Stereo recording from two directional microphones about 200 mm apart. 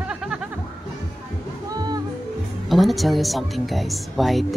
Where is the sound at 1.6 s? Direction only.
20° right (ahead or behind).